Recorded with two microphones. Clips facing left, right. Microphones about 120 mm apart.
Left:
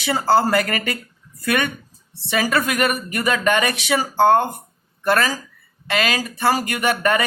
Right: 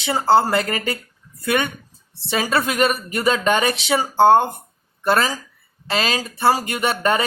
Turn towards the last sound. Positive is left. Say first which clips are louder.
# even
turn(degrees=-25)  # may be behind; listen again after turning